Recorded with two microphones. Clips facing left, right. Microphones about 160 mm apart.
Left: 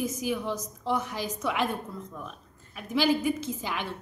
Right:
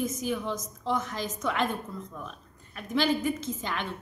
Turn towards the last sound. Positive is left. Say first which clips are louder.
# even
turn(degrees=10)  # may be behind; listen again after turning